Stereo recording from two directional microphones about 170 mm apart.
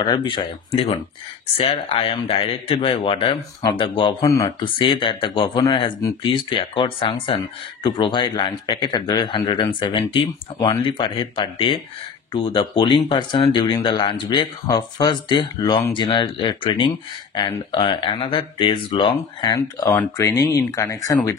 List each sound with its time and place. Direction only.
0.0 s speech: 25° left (ahead or behind)